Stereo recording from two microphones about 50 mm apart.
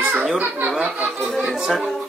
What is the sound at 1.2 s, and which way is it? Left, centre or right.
Speech, centre.